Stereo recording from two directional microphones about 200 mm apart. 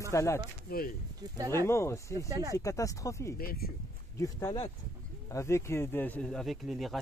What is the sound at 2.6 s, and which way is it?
Speech, 15° left (ahead or behind).